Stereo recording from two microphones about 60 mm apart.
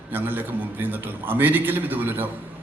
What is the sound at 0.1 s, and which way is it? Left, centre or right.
A man's voice, right.